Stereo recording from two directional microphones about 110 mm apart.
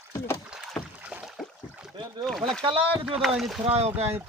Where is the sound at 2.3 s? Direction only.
5° left (ahead or behind).